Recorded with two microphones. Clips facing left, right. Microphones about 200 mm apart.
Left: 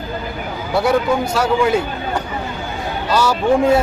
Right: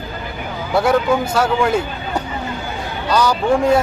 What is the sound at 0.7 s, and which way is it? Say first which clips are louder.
Speech: right 1 dB; centre (ahead or behind).